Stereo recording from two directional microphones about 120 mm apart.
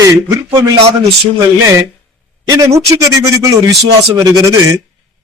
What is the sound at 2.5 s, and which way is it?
A man's voice, 25° right (ahead or behind).